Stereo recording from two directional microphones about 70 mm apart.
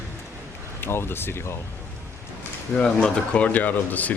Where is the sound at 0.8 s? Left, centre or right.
Left.